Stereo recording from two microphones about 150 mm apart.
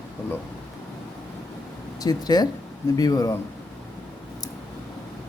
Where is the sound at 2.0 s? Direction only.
25° left (ahead or behind).